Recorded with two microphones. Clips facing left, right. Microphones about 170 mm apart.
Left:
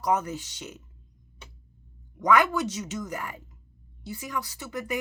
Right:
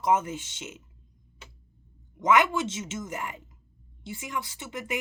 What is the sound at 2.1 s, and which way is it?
Speech, 20° right (ahead or behind).